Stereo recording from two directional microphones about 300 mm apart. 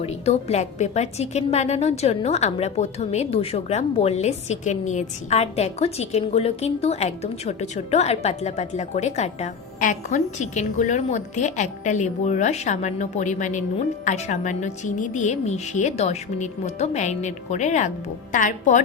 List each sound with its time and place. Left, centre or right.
0.0 s a woman's voice: centre